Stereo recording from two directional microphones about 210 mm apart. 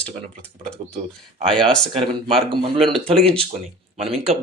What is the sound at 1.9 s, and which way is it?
Speech, 25° right (ahead or behind).